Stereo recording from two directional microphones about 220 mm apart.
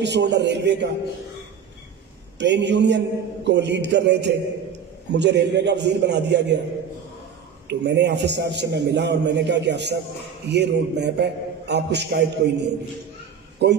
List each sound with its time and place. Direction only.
0.0 s a man's voice: 50° right (ahead or behind)
2.3 s a man's voice: 50° right (ahead or behind)
7.6 s a man's voice: 50° right (ahead or behind)